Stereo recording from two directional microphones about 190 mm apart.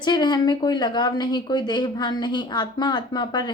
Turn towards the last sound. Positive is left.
turn(degrees=25)  # may be behind; listen again after turning